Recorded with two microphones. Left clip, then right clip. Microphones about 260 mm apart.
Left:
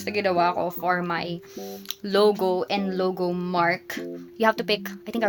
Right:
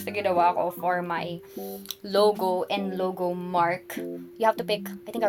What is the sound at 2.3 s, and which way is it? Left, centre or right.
A woman's voice, left.